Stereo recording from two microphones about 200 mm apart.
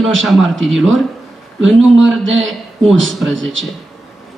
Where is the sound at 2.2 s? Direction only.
70° right (ahead or behind).